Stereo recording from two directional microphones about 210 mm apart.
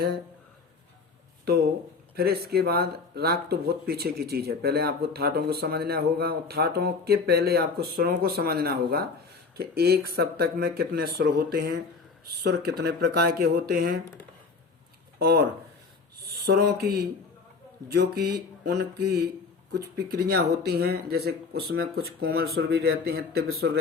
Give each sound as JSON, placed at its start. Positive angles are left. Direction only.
{"t": 2.1, "sound": "speech", "side_deg": -45}
{"t": 15.2, "sound": "speech", "side_deg": -50}
{"t": 16.6, "sound": "speech", "side_deg": -50}